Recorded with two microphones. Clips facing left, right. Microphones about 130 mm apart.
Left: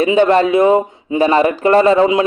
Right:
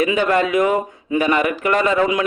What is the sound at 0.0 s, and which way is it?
Speech, 30° left (ahead or behind).